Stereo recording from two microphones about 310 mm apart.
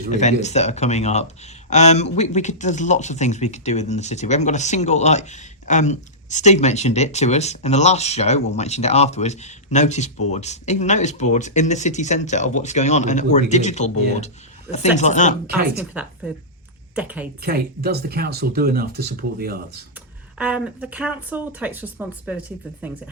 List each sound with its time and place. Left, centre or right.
0.1 s speech: left
15.8 s speech: centre
17.4 s speech: right
20.4 s speech: centre